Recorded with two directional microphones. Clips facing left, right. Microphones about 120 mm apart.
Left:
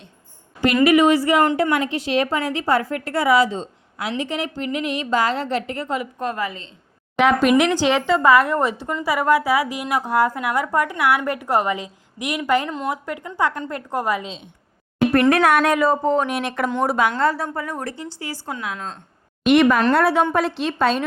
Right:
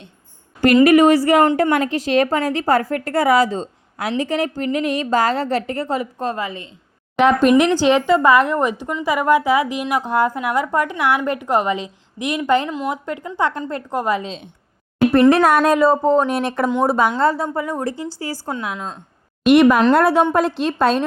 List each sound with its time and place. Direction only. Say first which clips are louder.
0.9 s a woman's voice: right 3 dB; 45° right (ahead or behind); by 6.6 s 25° right (ahead or behind)
7.2 s speech: right 3 dB; 10° left (ahead or behind)
7.9 s a woman's voice: right 2 dB; 15° right (ahead or behind)
14.2 s speech: right 3 dB; 45° right (ahead or behind)
15.1 s a woman's voice: right 3 dB; 20° right (ahead or behind)
18.2 s a woman's voice: right 4 dB; 35° right (ahead or behind)
19.6 s a woman's voice: right 4 dB; 20° right (ahead or behind)
20.0 s a woman's voice: right 3 dB; 40° right (ahead or behind)